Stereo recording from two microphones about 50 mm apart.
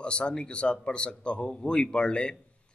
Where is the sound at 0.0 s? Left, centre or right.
Centre.